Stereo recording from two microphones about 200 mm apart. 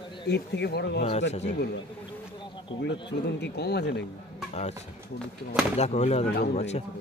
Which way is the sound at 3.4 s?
55° left (ahead or behind).